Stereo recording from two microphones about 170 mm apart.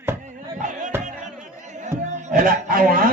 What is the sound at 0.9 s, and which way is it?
Music, 15° right (ahead or behind).